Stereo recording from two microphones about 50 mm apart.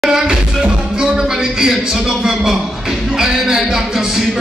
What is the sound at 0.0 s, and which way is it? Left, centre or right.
Music, centre.